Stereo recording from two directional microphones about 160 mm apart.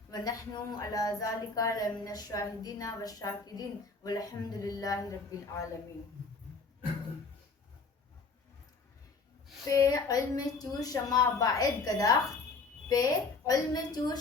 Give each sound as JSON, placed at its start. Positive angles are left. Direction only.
{"t": 0.1, "sound": "a woman's voice", "side_deg": 25}
{"t": 9.6, "sound": "a woman's voice", "side_deg": 20}